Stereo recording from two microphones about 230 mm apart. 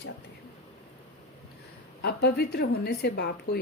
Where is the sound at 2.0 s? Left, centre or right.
Left.